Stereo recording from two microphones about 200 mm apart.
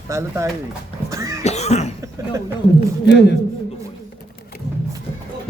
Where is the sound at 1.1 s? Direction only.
15° right (ahead or behind).